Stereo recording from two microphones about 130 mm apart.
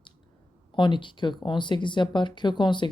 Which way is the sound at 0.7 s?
40° left (ahead or behind).